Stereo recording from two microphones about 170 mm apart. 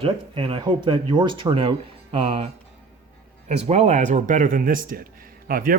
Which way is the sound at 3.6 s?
40° right (ahead or behind).